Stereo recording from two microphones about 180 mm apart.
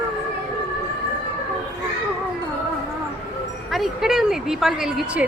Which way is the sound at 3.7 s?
Centre (ahead or behind).